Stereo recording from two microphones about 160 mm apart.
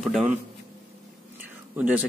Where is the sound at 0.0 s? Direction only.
5° right (ahead or behind).